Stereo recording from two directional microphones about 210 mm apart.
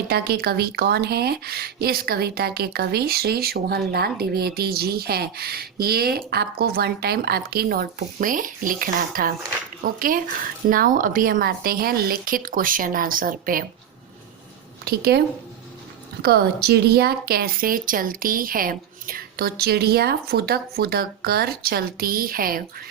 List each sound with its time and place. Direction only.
0.1 s a woman's voice: 45° right (ahead or behind)
14.8 s speech: 45° right (ahead or behind)
16.2 s speech: 50° right (ahead or behind)